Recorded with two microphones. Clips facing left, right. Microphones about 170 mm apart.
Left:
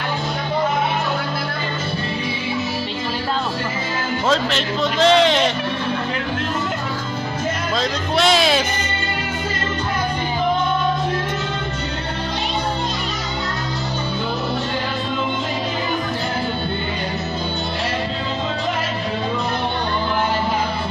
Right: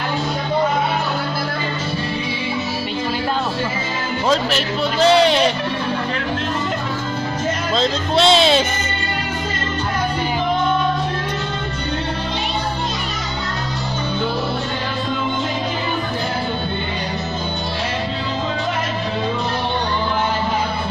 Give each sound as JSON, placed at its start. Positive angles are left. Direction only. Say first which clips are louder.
{"t": 4.3, "sound": "a man's voice", "louder": "right 2 dB", "side_deg": -10}
{"t": 7.7, "sound": "speech", "louder": "right 4 dB", "side_deg": -25}